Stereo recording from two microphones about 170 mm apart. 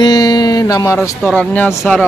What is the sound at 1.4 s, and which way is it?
Speech, 10° left (ahead or behind).